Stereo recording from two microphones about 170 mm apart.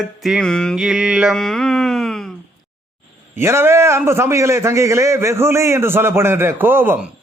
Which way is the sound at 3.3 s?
15° right (ahead or behind).